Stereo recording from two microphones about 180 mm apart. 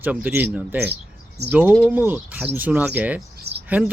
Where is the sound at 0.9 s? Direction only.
65° right (ahead or behind).